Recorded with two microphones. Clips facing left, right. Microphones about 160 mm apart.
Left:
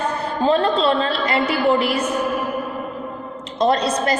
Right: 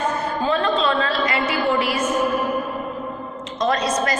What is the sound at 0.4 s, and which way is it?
Speech, 35° left (ahead or behind).